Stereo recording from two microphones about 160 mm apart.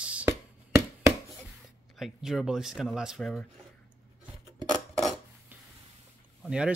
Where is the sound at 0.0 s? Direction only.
10° right (ahead or behind).